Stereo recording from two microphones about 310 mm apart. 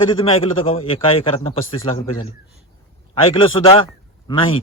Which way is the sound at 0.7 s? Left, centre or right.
Centre.